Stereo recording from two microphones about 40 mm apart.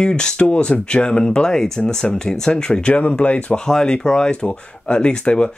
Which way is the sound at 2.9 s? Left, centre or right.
Left.